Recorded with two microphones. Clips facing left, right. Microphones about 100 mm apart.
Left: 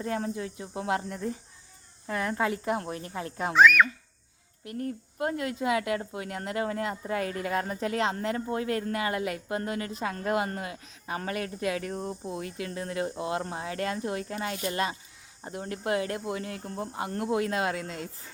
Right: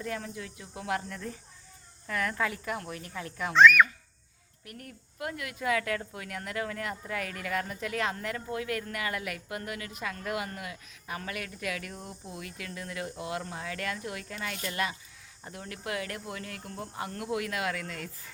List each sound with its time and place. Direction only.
0.0 s speech: 30° left (ahead or behind)
3.5 s speech: 5° left (ahead or behind)
4.6 s speech: 30° left (ahead or behind)